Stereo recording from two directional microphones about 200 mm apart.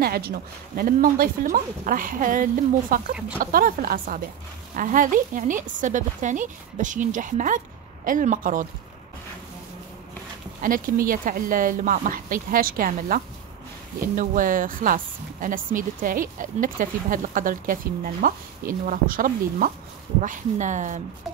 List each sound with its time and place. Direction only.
0.0 s a woman's voice: 50° right (ahead or behind)
10.6 s speech: 45° right (ahead or behind)